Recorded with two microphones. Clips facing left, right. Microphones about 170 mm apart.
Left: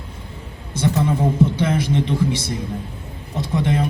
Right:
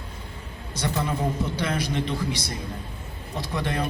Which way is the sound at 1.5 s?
25° left (ahead or behind).